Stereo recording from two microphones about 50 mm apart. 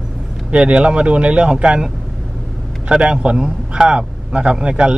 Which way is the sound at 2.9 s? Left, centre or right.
Centre.